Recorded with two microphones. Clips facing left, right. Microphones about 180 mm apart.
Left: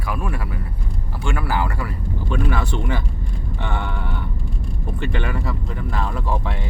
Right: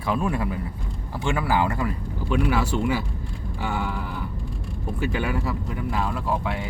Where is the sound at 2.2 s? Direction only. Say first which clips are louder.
Right 2 dB; 5° right (ahead or behind).